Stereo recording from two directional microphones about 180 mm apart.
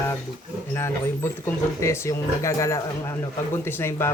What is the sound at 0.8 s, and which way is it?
Speech, 15° left (ahead or behind).